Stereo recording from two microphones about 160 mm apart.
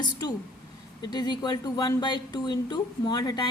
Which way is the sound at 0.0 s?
25° left (ahead or behind).